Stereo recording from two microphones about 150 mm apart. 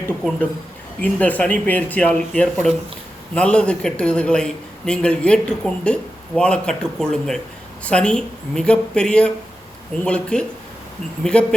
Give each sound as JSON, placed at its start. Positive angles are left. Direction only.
{"t": 1.0, "sound": "a man's voice", "side_deg": 10}